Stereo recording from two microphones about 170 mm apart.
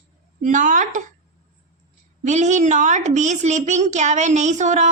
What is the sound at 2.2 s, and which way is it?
A woman's voice, 45° right (ahead or behind).